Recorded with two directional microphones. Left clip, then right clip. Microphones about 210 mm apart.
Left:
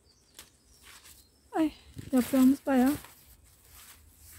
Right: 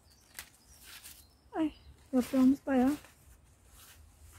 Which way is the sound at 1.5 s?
30° left (ahead or behind).